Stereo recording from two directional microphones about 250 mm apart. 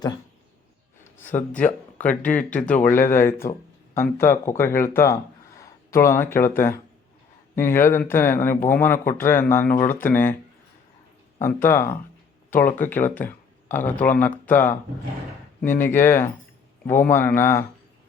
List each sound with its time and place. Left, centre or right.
1.5 s speech: centre
9.7 s speech: left
10.0 s speech: centre
11.3 s speech: centre
15.8 s speech: centre